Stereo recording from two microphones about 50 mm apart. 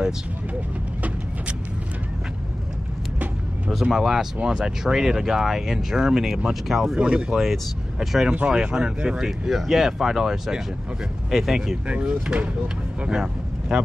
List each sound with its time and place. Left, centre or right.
3.9 s speech: centre
7.0 s speech: right
7.3 s speech: centre
11.9 s speech: right